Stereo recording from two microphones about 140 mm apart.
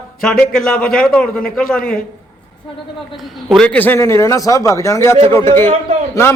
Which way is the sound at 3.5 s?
5° left (ahead or behind).